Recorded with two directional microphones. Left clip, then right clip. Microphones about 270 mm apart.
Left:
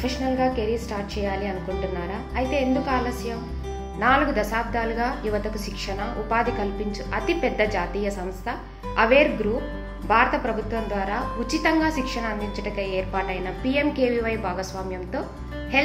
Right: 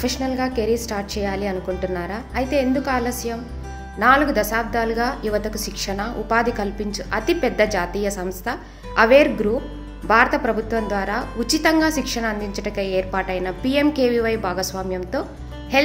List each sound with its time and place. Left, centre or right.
0.0 s a woman's voice: right